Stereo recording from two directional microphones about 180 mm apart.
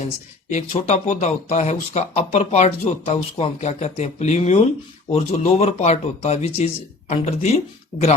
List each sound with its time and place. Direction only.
0.5 s speech: 35° left (ahead or behind)